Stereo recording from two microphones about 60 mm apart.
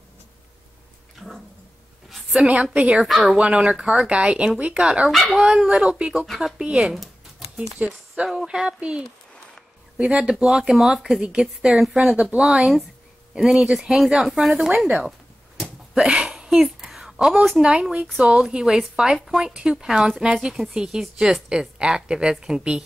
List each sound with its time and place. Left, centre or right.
2.0 s a sound: centre
2.4 s speech: right
5.1 s speech: centre
5.7 s speech: centre
6.2 s speech: centre
6.6 s speech: centre
7.8 s speech: right
8.5 s speech: centre
15.6 s a sound: centre
17.6 s speech: centre